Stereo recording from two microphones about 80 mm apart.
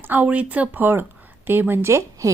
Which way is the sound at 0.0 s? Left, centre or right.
Right.